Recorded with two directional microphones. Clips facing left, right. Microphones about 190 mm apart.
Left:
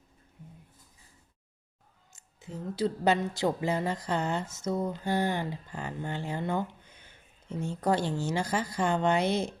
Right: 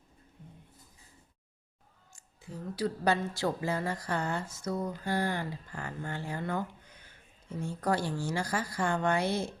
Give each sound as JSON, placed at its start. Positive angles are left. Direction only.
{"t": 2.1, "sound": "a woman's voice", "side_deg": 20}